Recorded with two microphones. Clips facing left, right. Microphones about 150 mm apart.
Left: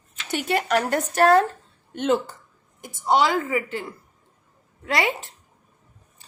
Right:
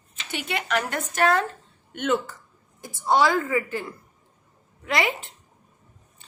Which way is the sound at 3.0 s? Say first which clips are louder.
Even; 20° left (ahead or behind).